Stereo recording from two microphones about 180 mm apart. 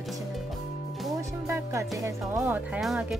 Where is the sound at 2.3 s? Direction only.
10° right (ahead or behind).